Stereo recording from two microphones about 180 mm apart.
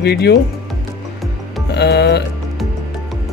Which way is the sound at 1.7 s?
70° left (ahead or behind).